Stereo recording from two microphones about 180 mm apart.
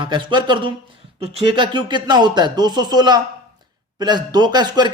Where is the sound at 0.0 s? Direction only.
25° right (ahead or behind).